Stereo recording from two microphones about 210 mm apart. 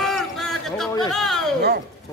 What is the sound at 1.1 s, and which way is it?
Speech, centre (ahead or behind).